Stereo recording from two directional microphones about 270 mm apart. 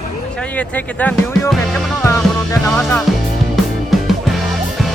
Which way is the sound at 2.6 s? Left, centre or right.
Centre.